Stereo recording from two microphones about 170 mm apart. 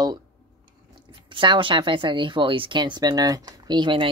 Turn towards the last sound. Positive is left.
turn(degrees=-30)  # may be behind; listen again after turning